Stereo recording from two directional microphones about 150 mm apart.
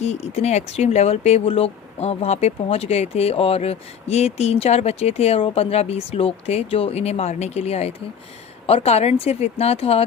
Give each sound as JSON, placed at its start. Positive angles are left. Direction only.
{"t": 0.0, "sound": "speech", "side_deg": 45}